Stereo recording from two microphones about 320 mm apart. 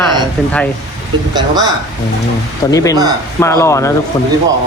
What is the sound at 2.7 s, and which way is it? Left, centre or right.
A man's voice, centre.